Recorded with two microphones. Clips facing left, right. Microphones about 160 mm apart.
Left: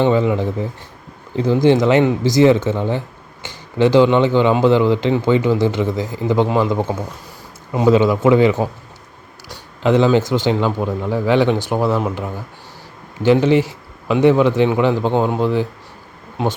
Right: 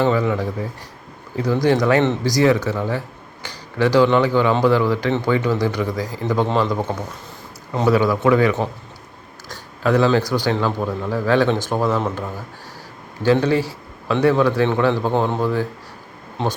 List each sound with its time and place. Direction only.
0.0 s speech: 20° left (ahead or behind)
6.9 s a man's voice: 10° left (ahead or behind)
9.8 s a man's voice: 20° left (ahead or behind)